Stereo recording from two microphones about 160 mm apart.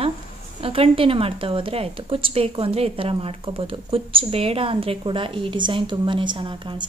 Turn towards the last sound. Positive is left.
turn(degrees=-30)  # may be behind; listen again after turning